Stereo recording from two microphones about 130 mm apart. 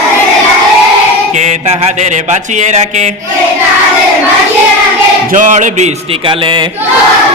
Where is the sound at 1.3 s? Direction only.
65° right (ahead or behind).